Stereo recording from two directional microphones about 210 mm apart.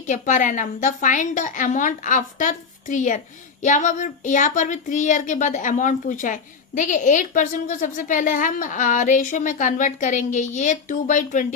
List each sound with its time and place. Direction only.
0.0 s speech: 35° left (ahead or behind)